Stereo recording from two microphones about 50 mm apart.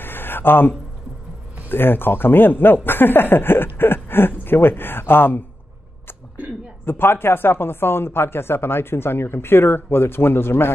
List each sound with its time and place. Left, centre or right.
0.0 s a sound: left
1.7 s speech: left
6.9 s speech: left